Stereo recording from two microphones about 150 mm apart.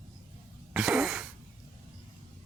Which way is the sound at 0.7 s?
5° right (ahead or behind).